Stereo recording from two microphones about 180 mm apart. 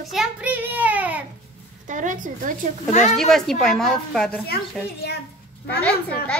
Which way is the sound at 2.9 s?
40° left (ahead or behind).